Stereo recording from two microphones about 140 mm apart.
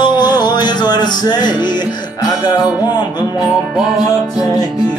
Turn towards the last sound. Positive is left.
turn(degrees=30)  # may be behind; listen again after turning